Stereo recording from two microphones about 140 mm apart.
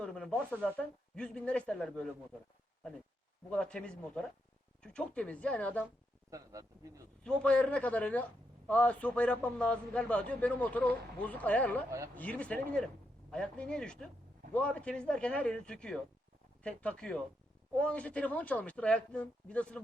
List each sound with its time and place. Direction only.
0.0 s speech: 5° left (ahead or behind)
3.5 s speech: 5° left (ahead or behind)
6.3 s speech: 25° right (ahead or behind)
7.3 s speech: 10° left (ahead or behind)